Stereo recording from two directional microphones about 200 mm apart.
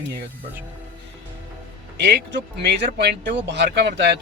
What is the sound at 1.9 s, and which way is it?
Speech, 55° right (ahead or behind).